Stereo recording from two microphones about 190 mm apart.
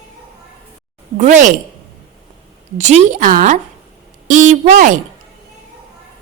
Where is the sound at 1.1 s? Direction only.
40° right (ahead or behind).